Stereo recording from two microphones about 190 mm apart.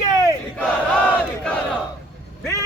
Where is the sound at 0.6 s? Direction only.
5° left (ahead or behind).